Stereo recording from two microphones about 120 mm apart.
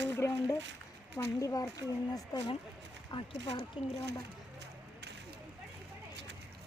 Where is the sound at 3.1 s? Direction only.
40° left (ahead or behind).